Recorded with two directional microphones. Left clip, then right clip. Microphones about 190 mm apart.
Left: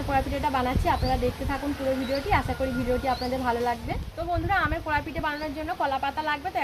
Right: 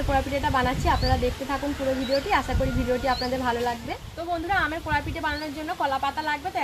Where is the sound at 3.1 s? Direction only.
Centre (ahead or behind).